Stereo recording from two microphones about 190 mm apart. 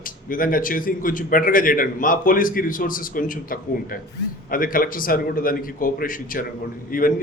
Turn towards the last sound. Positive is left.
turn(degrees=45)  # may be behind; listen again after turning